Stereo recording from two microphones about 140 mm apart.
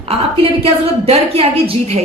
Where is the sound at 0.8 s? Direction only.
45° right (ahead or behind).